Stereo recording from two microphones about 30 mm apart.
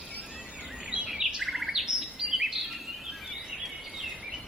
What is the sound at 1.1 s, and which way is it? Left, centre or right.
Chirp, centre.